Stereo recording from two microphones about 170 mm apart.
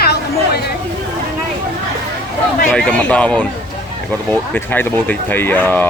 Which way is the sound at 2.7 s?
5° left (ahead or behind).